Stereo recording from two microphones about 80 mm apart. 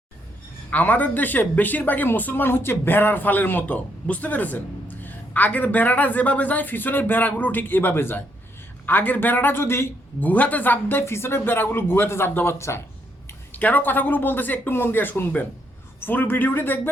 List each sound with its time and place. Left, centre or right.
0.7 s speech: left
10.2 s speech: centre
12.5 s speech: left
13.5 s speech: left